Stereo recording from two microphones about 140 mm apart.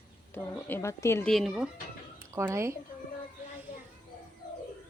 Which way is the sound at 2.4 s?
20° right (ahead or behind).